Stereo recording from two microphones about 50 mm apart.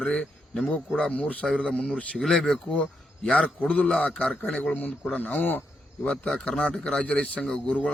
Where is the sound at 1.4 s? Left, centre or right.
Centre.